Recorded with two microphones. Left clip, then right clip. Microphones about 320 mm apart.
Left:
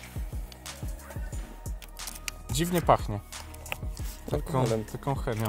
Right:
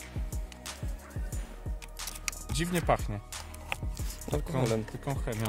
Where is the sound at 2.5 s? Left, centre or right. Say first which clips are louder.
Left 5 dB; centre.